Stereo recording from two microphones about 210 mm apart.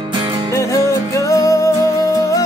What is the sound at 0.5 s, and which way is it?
Music, 15° left (ahead or behind).